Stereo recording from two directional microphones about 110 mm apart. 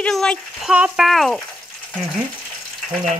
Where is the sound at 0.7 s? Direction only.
10° right (ahead or behind).